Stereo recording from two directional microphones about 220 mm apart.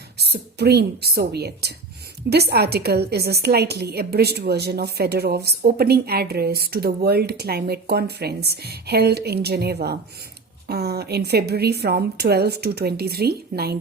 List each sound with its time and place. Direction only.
0.2 s a woman's voice: 50° right (ahead or behind)